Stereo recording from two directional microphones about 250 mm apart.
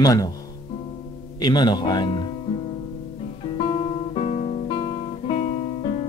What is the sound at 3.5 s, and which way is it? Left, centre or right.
Guitar, left.